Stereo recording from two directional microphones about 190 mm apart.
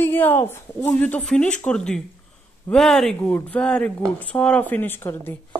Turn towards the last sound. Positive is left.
turn(degrees=10)  # may be behind; listen again after turning